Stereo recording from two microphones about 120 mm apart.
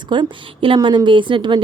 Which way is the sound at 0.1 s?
45° right (ahead or behind).